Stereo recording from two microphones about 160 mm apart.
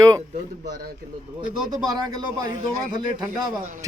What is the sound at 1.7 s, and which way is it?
Speech, 25° right (ahead or behind).